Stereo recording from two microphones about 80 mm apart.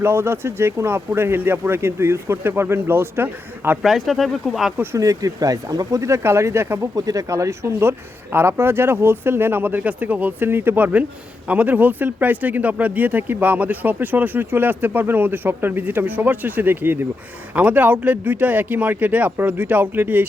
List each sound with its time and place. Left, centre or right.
0.0 s speech: right
3.8 s speech: centre
4.9 s speech: right
6.9 s speech: right